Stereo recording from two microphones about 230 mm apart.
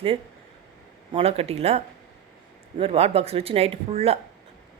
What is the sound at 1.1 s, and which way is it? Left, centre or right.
Speech, right.